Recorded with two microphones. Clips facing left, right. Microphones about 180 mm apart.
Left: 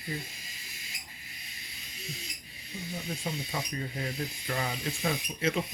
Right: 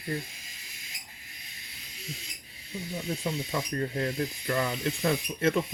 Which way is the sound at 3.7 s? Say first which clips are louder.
Right 6 dB; 55° right (ahead or behind).